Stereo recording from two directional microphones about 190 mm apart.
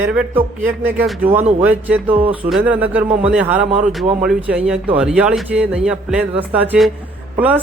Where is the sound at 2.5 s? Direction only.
5° right (ahead or behind).